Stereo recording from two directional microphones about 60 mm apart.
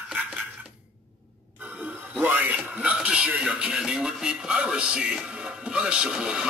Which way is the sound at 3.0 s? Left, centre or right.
Centre.